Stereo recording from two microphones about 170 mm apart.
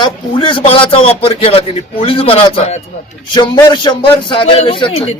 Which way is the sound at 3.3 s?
25° left (ahead or behind).